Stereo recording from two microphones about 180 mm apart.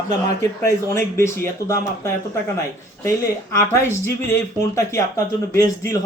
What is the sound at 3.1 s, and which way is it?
Speech, 15° left (ahead or behind).